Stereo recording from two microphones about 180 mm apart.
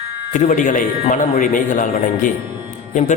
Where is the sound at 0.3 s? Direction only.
45° left (ahead or behind).